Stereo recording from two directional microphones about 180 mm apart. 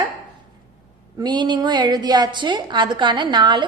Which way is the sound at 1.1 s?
25° right (ahead or behind).